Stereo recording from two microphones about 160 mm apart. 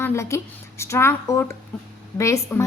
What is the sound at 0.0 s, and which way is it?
A woman's voice, 15° left (ahead or behind).